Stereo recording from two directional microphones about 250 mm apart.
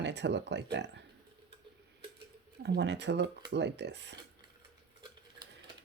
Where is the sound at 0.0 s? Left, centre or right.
Right.